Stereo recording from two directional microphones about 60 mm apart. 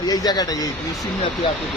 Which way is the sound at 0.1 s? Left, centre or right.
Left.